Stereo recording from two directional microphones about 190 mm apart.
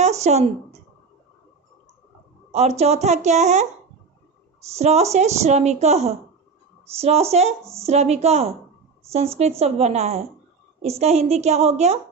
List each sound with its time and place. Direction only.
0.0 s a sound: 35° right (ahead or behind)
2.5 s a woman's voice: 35° right (ahead or behind)
4.7 s a woman's voice: 35° right (ahead or behind)